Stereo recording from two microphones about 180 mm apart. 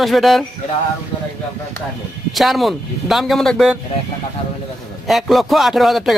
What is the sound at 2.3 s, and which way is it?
A man's voice, centre (ahead or behind).